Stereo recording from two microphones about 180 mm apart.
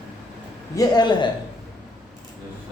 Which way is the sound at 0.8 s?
25° left (ahead or behind).